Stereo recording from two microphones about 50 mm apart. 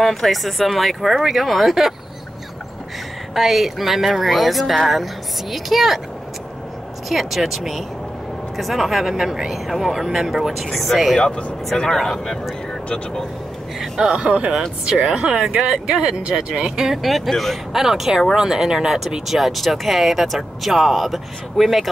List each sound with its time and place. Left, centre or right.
0.0 s speech: centre
3.3 s speech: centre
7.1 s speech: centre
11.1 s speech: centre
12.0 s speech: centre
14.0 s speech: right; by 21.8 s centre